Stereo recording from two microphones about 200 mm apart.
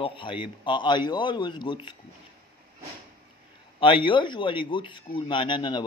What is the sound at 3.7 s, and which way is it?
Speech, 25° left (ahead or behind).